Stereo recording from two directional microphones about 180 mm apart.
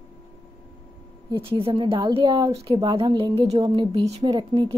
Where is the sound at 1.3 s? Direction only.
30° right (ahead or behind).